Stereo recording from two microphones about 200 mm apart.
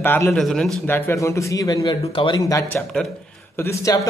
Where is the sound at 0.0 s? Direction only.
10° left (ahead or behind).